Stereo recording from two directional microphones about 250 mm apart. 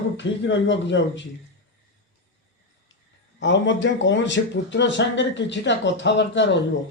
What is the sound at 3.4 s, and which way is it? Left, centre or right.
Speech, left.